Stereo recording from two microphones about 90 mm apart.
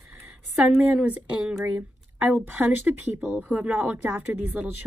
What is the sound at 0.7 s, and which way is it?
A woman's voice, 10° right (ahead or behind).